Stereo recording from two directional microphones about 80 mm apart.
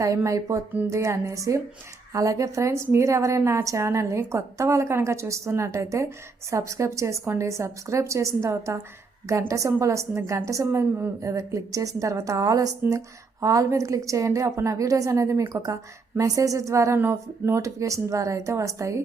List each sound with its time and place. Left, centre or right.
0.0 s a woman's voice: right